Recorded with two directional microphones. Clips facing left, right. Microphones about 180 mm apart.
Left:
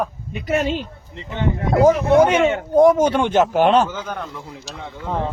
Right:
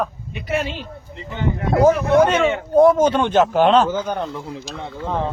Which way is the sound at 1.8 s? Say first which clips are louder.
Left 1 dB; 10° left (ahead or behind).